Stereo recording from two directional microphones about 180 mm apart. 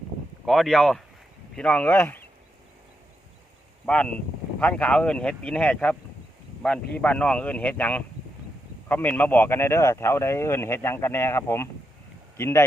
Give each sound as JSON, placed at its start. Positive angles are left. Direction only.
{"t": 0.4, "sound": "speech", "side_deg": 0}
{"t": 3.8, "sound": "speech", "side_deg": 5}